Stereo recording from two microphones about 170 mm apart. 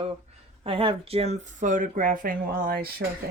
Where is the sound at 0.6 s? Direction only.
30° right (ahead or behind).